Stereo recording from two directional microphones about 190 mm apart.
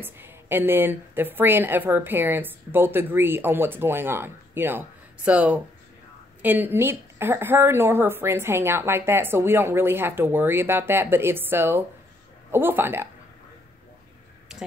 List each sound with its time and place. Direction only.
0.0 s a woman's voice: 10° right (ahead or behind)